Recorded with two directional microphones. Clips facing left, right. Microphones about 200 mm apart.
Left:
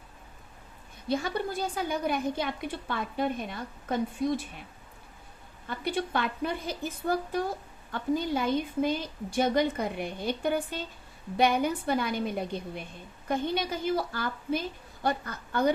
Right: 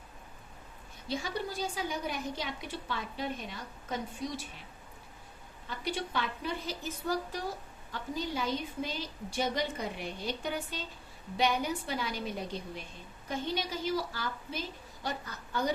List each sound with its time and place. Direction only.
1.0 s a woman's voice: 55° left (ahead or behind)
5.6 s a woman's voice: 55° left (ahead or behind)